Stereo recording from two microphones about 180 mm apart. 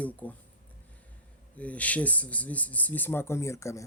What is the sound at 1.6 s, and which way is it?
Speech, 10° left (ahead or behind).